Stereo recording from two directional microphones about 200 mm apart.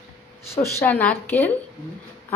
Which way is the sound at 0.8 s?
10° left (ahead or behind).